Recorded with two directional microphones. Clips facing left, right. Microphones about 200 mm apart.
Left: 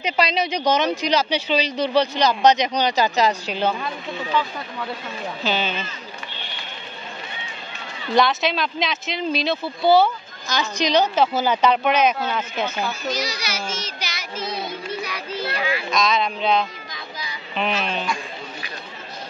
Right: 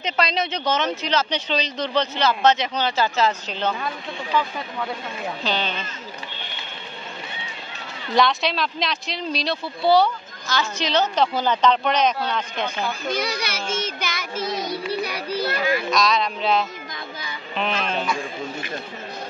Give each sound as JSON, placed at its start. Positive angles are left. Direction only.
{"t": 0.0, "sound": "speech", "side_deg": 10}
{"t": 5.4, "sound": "speech", "side_deg": 5}
{"t": 8.1, "sound": "speech", "side_deg": 0}
{"t": 10.5, "sound": "speech", "side_deg": 15}
{"t": 13.1, "sound": "a child's voice", "side_deg": -55}
{"t": 15.9, "sound": "speech", "side_deg": 0}